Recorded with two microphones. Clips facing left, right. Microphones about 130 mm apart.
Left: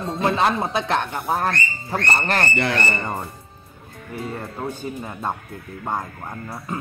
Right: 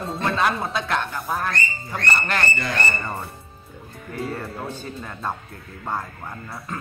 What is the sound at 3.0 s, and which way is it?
Speech, 20° left (ahead or behind).